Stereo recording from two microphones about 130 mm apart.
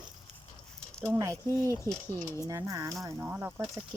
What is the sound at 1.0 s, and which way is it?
Speech, 20° right (ahead or behind).